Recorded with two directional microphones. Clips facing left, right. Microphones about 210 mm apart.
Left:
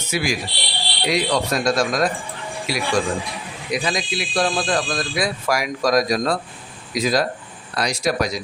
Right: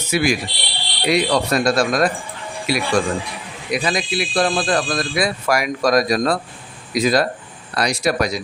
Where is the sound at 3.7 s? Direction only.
60° right (ahead or behind).